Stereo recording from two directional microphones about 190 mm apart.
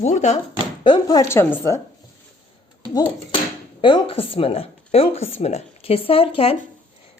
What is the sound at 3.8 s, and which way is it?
Speech, 25° left (ahead or behind).